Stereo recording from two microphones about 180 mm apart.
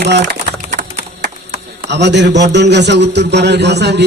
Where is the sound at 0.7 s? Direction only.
50° right (ahead or behind).